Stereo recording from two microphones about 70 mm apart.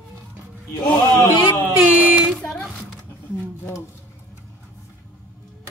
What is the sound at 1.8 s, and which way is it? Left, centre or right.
Speech, centre.